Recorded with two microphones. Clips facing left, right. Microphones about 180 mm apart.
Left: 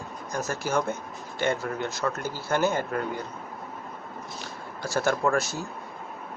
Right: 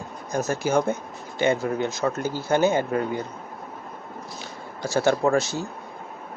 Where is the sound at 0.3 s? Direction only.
25° right (ahead or behind).